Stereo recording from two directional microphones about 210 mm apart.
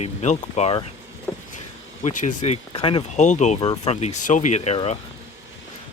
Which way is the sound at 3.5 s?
20° left (ahead or behind).